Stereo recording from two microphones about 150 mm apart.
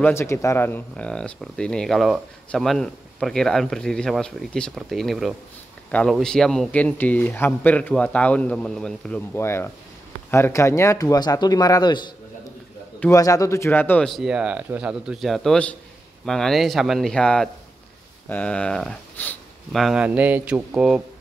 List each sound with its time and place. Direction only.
0.0 s a man's voice: 15° left (ahead or behind)
13.1 s a man's voice: 20° left (ahead or behind)
14.0 s speech: centre (ahead or behind)
19.8 s speech: 5° right (ahead or behind)